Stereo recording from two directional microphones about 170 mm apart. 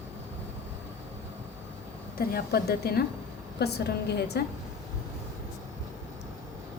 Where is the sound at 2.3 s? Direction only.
65° left (ahead or behind).